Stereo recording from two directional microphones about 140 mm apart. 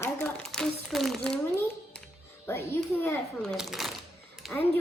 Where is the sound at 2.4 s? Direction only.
20° left (ahead or behind).